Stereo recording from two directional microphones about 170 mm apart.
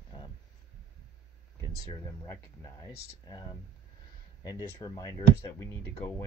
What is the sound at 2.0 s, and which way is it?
Speech, 15° left (ahead or behind).